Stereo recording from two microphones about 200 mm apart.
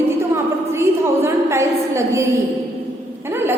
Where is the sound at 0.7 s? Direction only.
15° right (ahead or behind).